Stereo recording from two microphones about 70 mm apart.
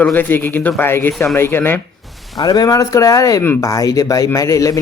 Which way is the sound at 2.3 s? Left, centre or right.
Left.